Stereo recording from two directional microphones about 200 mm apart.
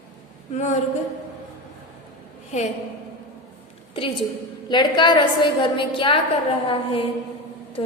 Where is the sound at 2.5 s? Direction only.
35° left (ahead or behind).